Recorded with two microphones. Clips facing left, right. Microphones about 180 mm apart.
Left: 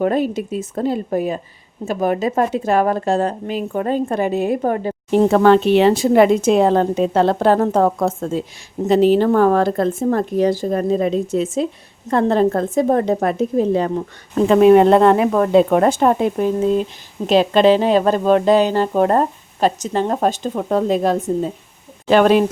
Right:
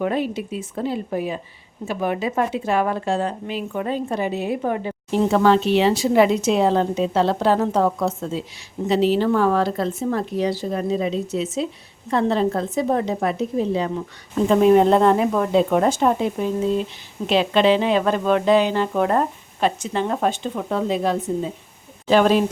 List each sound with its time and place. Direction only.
0.0 s speech: 45° left (ahead or behind)
14.4 s speech: 70° left (ahead or behind); by 21.2 s 45° left (ahead or behind)
22.0 s speech: 60° left (ahead or behind)